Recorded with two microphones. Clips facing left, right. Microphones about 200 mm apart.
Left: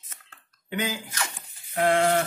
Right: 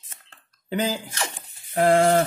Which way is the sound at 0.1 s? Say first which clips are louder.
Right 1 dB; 30° right (ahead or behind).